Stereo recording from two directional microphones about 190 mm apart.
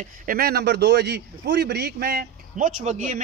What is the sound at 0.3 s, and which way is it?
A man's voice, 55° right (ahead or behind).